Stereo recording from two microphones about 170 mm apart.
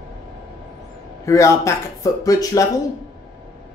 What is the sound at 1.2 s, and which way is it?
Speech, 15° left (ahead or behind).